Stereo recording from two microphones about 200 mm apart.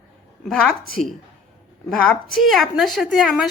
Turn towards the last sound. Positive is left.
turn(degrees=0)  # may be behind; listen again after turning